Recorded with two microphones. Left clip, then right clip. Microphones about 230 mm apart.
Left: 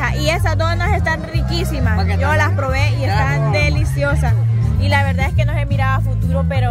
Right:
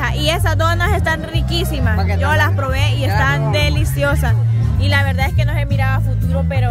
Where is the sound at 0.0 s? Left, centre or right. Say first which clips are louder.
Even; centre.